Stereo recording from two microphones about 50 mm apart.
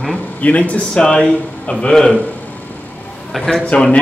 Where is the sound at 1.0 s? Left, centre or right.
Centre.